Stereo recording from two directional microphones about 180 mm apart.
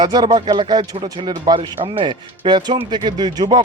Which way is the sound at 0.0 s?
25° right (ahead or behind).